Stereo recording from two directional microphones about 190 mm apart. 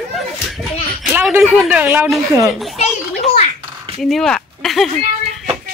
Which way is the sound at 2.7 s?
35° left (ahead or behind).